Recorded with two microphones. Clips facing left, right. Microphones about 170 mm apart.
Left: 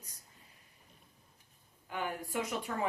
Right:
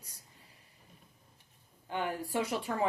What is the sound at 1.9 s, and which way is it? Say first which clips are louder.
Speech: right 3 dB; 30° right (ahead or behind).